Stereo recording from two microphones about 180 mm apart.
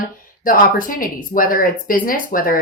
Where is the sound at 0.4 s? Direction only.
50° left (ahead or behind).